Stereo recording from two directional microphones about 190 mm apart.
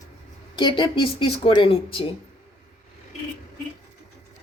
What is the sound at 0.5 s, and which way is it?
A woman's voice, 25° left (ahead or behind).